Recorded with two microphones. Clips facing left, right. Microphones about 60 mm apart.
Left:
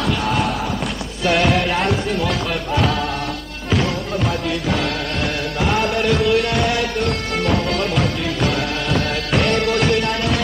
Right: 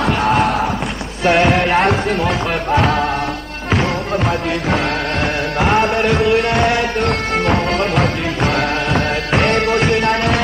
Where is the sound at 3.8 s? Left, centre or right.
Right.